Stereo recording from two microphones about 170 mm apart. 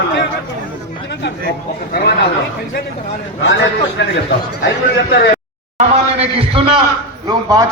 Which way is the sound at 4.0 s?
90° left.